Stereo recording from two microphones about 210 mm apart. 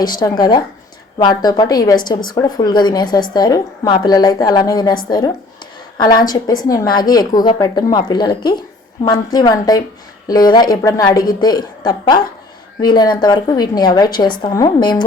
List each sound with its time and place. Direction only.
0.0 s a woman's voice: 20° left (ahead or behind)
6.0 s a woman's voice: 20° left (ahead or behind)